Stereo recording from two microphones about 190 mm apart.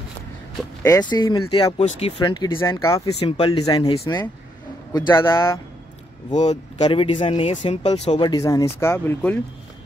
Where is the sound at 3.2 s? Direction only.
30° left (ahead or behind).